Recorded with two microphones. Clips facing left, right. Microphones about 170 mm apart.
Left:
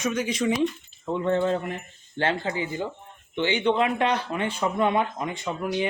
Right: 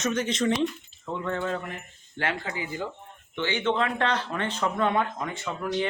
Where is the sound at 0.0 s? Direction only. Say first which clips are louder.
Left 1 dB; 10° left (ahead or behind).